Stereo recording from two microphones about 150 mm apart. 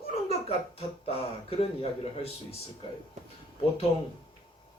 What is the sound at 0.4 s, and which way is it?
Speech, 40° left (ahead or behind).